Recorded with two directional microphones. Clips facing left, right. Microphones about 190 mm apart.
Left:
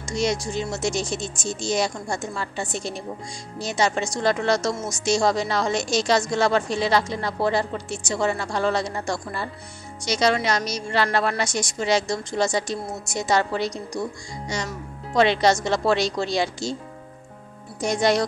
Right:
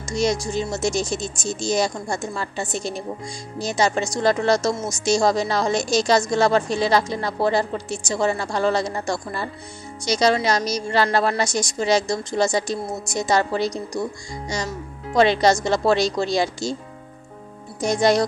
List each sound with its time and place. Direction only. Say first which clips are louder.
0.1 s a woman's voice: right 2 dB; 40° right (ahead or behind)
15.1 s a woman's voice: right 2 dB; 40° right (ahead or behind)
17.8 s a woman's voice: right 3 dB; 40° right (ahead or behind)